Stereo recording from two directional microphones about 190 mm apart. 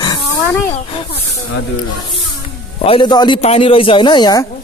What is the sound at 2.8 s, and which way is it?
A man's voice, 25° left (ahead or behind).